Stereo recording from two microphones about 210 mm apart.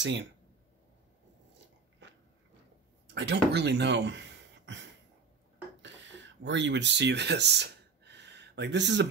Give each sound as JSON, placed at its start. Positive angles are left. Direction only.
{"t": 0.0, "sound": "speech", "side_deg": -60}
{"t": 2.0, "sound": "biting", "side_deg": -55}
{"t": 3.2, "sound": "speech", "side_deg": -55}
{"t": 5.8, "sound": "a sound", "side_deg": -60}